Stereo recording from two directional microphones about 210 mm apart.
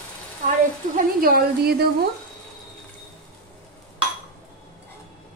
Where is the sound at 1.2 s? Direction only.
45° right (ahead or behind).